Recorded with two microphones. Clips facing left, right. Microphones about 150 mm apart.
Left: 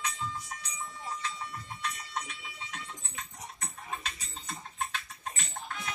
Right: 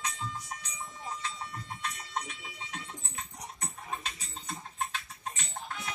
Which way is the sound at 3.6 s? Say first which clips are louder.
Right 1 dB; 20° right (ahead or behind).